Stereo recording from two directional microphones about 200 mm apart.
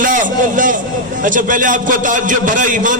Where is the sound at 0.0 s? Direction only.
40° right (ahead or behind).